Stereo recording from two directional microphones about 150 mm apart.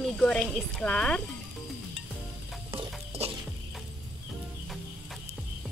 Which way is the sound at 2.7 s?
40° right (ahead or behind).